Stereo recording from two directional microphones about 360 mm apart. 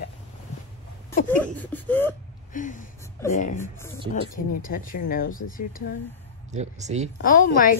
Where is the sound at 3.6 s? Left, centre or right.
Centre.